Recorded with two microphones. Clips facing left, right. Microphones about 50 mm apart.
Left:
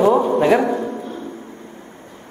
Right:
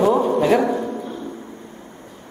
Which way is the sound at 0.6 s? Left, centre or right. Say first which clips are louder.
Left 1 dB; centre.